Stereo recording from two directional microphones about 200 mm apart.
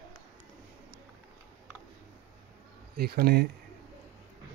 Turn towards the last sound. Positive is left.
turn(degrees=-50)  # may be behind; listen again after turning